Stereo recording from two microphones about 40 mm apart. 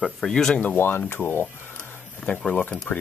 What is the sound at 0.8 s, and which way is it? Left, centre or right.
Speech, left.